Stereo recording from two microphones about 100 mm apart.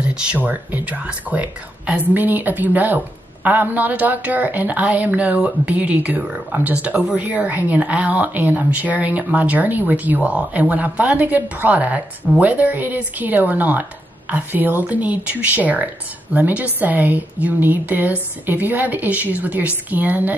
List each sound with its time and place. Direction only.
0.0 s a woman's voice: 10° right (ahead or behind)